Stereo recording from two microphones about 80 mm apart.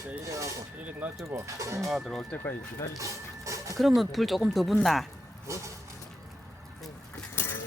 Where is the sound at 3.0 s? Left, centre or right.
Right.